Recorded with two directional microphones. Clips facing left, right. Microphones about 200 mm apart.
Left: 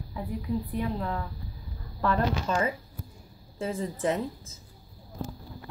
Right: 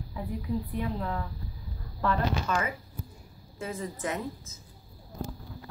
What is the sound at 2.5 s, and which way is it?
A woman's voice, 30° left (ahead or behind).